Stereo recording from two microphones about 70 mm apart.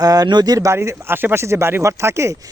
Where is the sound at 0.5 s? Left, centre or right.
Right.